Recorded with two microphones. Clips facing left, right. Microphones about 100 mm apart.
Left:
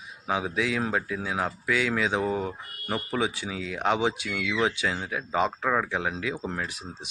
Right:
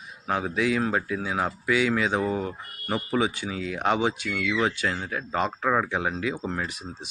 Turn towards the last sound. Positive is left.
turn(degrees=0)  # may be behind; listen again after turning